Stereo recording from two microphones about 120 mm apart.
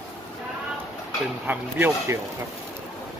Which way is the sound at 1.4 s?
15° right (ahead or behind).